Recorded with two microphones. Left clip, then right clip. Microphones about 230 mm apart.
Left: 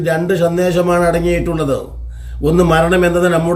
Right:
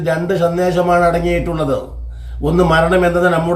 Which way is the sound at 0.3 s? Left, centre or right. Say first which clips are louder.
Even; centre.